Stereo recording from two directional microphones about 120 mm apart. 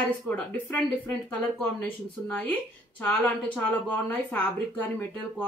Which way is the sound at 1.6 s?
15° left (ahead or behind).